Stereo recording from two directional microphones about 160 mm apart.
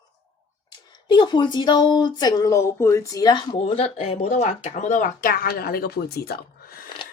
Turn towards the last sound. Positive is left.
turn(degrees=70)  # may be behind; listen again after turning